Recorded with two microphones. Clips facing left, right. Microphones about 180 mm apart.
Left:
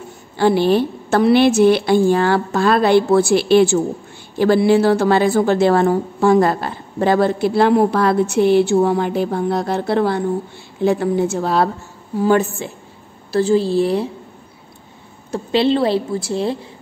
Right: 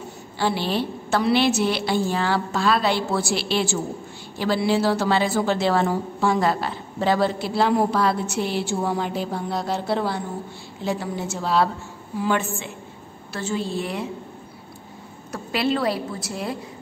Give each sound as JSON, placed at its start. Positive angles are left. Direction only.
{"t": 0.4, "sound": "a woman's voice", "side_deg": 50}
{"t": 15.3, "sound": "a woman's voice", "side_deg": 25}